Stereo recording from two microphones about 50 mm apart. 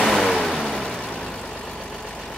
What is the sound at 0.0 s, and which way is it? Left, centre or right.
Vehicle, centre.